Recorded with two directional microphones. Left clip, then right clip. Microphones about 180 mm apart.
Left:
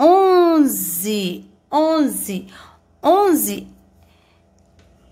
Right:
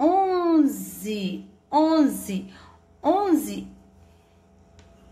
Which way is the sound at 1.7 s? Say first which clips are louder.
Left 3 dB; 30° left (ahead or behind).